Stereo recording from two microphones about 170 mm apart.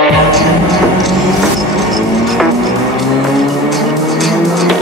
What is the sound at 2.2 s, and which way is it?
Music, centre (ahead or behind).